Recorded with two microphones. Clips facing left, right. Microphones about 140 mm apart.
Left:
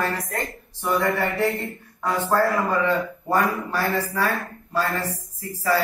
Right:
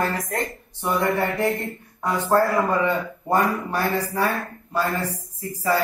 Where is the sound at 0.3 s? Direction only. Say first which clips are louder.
Right 2 dB; 15° right (ahead or behind).